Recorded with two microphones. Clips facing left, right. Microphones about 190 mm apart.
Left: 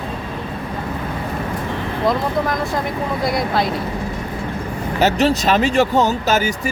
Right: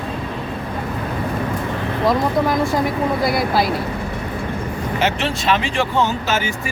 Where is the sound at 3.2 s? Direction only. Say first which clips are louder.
Left 1 dB; 5° right (ahead or behind).